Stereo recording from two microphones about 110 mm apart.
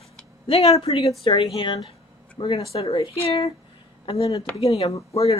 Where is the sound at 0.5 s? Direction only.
65° left (ahead or behind).